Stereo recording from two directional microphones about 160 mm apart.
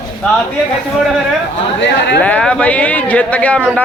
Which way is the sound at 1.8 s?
90° left.